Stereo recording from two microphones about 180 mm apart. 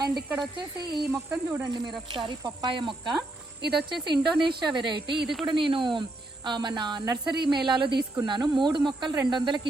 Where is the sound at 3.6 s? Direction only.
65° right (ahead or behind).